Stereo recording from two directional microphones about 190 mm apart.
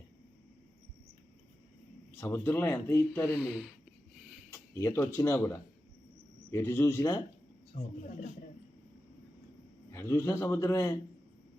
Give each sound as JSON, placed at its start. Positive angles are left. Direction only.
{"t": 2.2, "sound": "speech", "side_deg": 10}
{"t": 4.5, "sound": "speech", "side_deg": 15}
{"t": 7.7, "sound": "speech", "side_deg": 40}
{"t": 9.9, "sound": "speech", "side_deg": 15}